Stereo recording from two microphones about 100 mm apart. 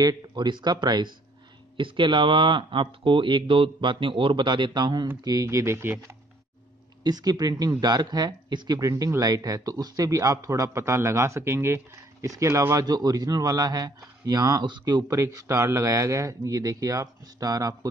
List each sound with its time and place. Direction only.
0.0 s speech: 40° right (ahead or behind)
1.8 s speech: 55° right (ahead or behind)
5.2 s speech: 35° right (ahead or behind)
7.0 s speech: 40° right (ahead or behind)
15.0 s speech: 30° right (ahead or behind)